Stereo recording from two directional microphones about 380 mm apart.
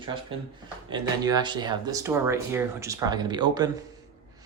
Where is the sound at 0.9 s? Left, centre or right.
Centre.